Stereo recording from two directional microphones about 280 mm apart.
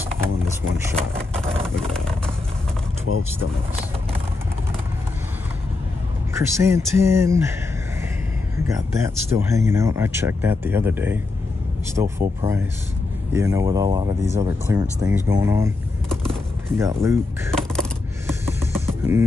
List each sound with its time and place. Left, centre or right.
3.1 s speech: left
6.3 s speech: centre
8.6 s speech: centre
16.7 s speech: centre
18.2 s music: centre